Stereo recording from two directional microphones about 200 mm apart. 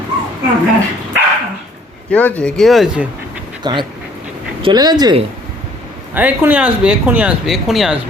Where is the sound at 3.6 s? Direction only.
20° right (ahead or behind).